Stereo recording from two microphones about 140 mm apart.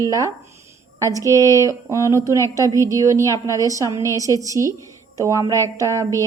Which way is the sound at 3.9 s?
30° left (ahead or behind).